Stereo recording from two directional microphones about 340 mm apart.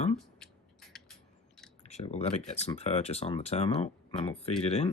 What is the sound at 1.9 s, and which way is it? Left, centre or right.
Speech, centre.